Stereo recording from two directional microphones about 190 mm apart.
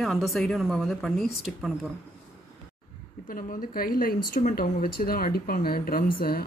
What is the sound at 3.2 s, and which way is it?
Speech, 45° left (ahead or behind).